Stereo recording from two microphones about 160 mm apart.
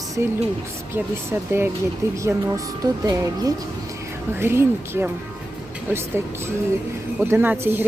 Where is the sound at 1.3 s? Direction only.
15° right (ahead or behind).